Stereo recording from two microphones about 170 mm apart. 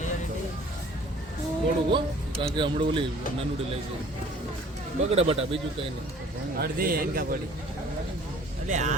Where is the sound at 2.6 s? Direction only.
30° right (ahead or behind).